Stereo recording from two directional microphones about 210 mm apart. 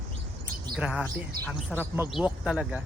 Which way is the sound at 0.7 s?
5° right (ahead or behind).